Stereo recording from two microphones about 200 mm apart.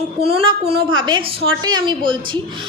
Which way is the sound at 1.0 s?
20° right (ahead or behind).